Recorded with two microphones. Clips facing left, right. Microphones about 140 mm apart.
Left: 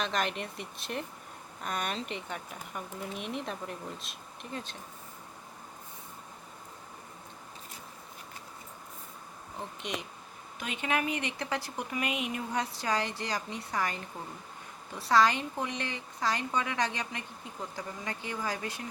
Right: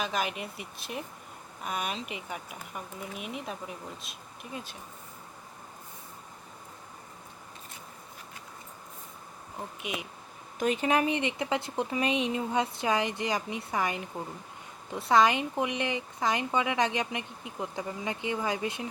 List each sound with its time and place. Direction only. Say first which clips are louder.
0.0 s speech: even; 5° right (ahead or behind)
9.6 s speech: right 1 dB; 5° right (ahead or behind)
10.6 s speech: right 6 dB; 40° right (ahead or behind); by 18.9 s 20° right (ahead or behind)